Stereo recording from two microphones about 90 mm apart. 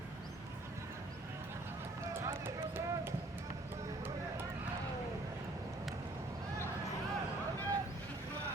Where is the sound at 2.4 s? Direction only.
25° right (ahead or behind).